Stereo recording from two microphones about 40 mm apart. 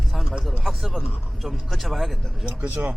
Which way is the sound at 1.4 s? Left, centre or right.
Centre.